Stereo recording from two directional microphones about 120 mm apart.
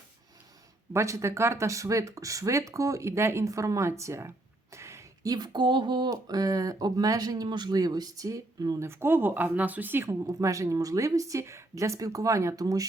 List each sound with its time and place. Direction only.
0.9 s speech: 25° right (ahead or behind)